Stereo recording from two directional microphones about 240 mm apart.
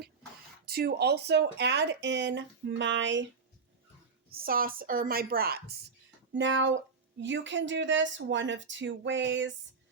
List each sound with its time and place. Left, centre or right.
0.6 s speech: right
4.3 s speech: right
6.3 s speech: right